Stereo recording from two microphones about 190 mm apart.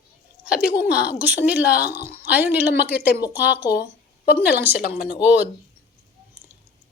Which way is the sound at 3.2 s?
60° left (ahead or behind).